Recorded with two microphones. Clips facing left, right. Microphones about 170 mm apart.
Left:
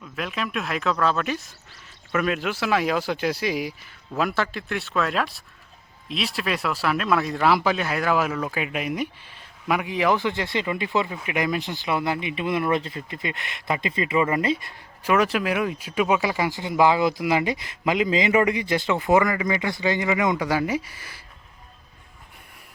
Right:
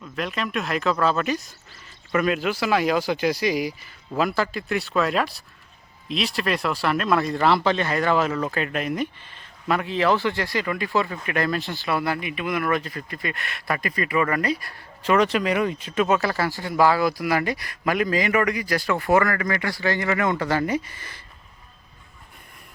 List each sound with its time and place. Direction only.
0.0 s speech: centre (ahead or behind); by 14.8 s 20° left (ahead or behind)
15.0 s speech: 5° left (ahead or behind)